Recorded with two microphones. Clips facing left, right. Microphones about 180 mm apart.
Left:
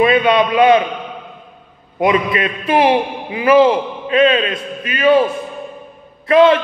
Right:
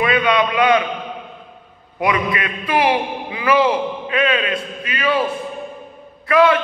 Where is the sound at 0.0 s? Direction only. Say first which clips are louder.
Left 4 dB; 25° left (ahead or behind).